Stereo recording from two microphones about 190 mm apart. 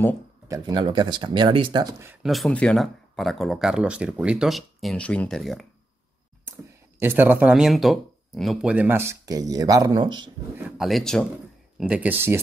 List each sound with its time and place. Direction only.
0.5 s speech: 25° right (ahead or behind)
2.2 s speech: centre (ahead or behind)
7.0 s speech: 10° right (ahead or behind)
10.6 s speech: centre (ahead or behind)